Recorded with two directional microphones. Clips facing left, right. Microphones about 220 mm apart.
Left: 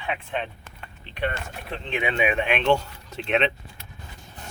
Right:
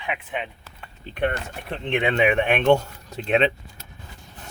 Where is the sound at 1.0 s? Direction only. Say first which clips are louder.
Right 4 dB; 50° right (ahead or behind).